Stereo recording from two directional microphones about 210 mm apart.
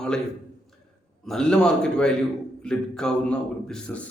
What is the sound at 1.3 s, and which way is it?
A man's voice, 5° left (ahead or behind).